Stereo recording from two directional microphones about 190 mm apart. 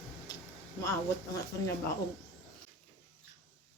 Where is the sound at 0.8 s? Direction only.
15° left (ahead or behind).